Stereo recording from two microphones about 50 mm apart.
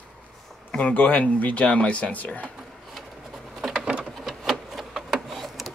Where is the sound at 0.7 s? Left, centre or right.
Left.